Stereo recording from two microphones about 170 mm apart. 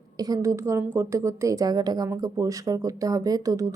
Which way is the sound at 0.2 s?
20° right (ahead or behind).